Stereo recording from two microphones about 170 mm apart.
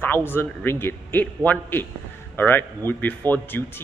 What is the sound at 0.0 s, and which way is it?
Speech, 15° left (ahead or behind).